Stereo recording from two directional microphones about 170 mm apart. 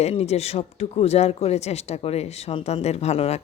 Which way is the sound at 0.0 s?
40° left (ahead or behind).